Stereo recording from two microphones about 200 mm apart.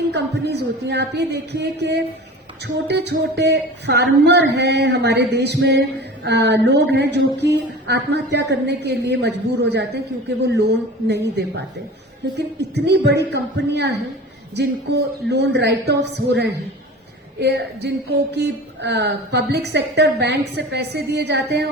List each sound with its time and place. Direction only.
0.1 s speech: 60° right (ahead or behind)